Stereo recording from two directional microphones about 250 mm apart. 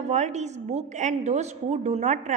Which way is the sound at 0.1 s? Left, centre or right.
Right.